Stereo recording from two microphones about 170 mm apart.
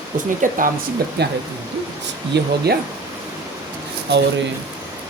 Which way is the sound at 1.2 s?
75° right (ahead or behind).